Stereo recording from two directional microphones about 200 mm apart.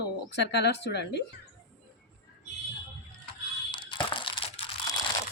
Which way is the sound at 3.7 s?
25° left (ahead or behind).